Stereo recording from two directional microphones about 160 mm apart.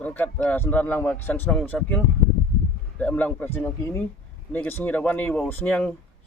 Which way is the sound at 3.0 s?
10° left (ahead or behind).